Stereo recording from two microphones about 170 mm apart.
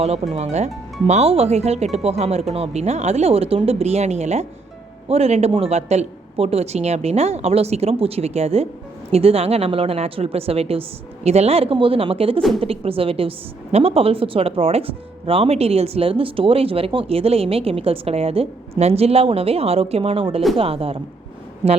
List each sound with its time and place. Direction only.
0.0 s speech: 40° right (ahead or behind)